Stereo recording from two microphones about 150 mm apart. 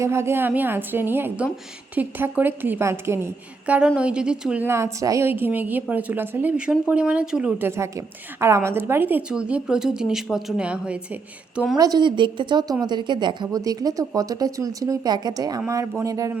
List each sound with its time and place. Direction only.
0.0 s a woman's voice: 15° right (ahead or behind)
3.7 s a woman's voice: 5° right (ahead or behind)
11.8 s a woman's voice: 30° right (ahead or behind)